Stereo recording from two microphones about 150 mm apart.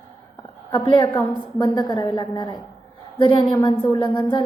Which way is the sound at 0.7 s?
30° left (ahead or behind).